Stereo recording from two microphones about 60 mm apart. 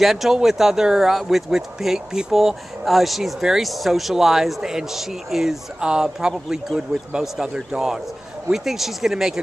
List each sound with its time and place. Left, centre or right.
0.0 s speech: centre